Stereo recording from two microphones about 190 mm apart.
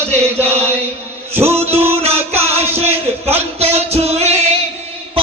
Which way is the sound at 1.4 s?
30° right (ahead or behind).